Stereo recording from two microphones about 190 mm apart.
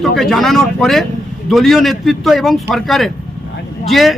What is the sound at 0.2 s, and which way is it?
A man's voice, centre (ahead or behind).